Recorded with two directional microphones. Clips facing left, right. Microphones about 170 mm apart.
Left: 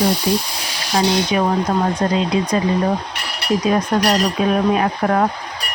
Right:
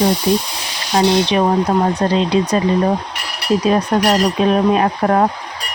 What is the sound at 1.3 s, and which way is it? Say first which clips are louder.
Speech: right 3 dB; 35° right (ahead or behind).